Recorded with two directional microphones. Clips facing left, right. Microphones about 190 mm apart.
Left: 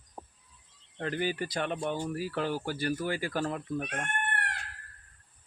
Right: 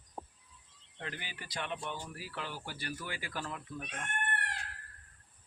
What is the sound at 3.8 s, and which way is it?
Speech, 70° left (ahead or behind).